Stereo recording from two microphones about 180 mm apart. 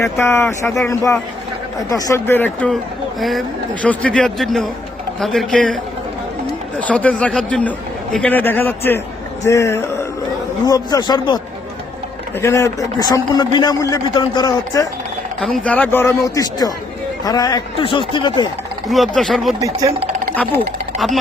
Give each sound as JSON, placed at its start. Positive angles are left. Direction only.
{"t": 0.0, "sound": "a man's voice", "side_deg": 15}
{"t": 12.4, "sound": "a man's voice", "side_deg": 15}
{"t": 15.4, "sound": "a man's voice", "side_deg": 5}
{"t": 18.9, "sound": "a man's voice", "side_deg": 0}